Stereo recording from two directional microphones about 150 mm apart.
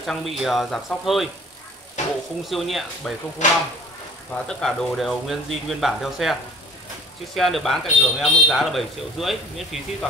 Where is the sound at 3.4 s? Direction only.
55° left (ahead or behind).